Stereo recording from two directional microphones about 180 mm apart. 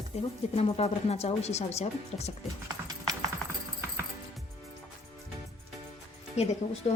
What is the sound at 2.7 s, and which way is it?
Music, 20° right (ahead or behind).